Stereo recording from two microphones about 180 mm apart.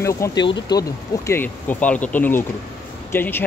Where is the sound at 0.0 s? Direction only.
20° left (ahead or behind).